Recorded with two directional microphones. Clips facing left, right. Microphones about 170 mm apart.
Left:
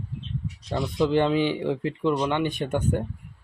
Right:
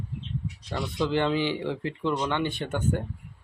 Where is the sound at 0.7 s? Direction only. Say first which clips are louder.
Left 4 dB; 20° left (ahead or behind).